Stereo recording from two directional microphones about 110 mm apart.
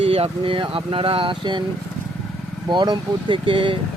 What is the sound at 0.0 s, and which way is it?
Speech, 65° right (ahead or behind).